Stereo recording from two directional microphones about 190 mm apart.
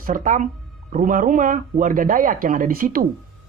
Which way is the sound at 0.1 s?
40° right (ahead or behind).